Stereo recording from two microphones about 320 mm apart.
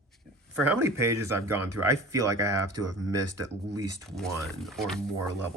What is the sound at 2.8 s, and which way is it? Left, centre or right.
Speech, right.